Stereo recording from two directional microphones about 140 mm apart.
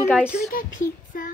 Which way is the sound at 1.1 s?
90° left.